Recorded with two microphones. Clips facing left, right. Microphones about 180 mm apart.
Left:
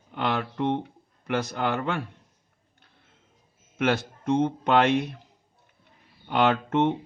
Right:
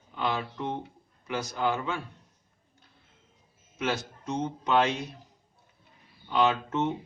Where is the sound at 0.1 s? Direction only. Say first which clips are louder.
Left 3 dB; 60° left (ahead or behind).